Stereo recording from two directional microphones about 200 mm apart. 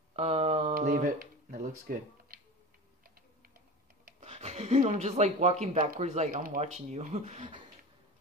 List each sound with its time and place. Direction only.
0.1 s mantra: 30° right (ahead or behind)
0.7 s speech: 40° right (ahead or behind)
4.2 s speech: 30° right (ahead or behind)